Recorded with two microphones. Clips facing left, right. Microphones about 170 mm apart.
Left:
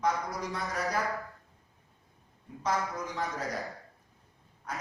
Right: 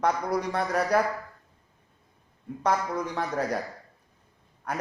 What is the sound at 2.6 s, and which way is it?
A man's voice, 65° right (ahead or behind).